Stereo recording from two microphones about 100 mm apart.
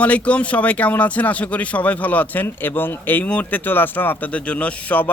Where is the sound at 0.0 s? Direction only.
15° left (ahead or behind).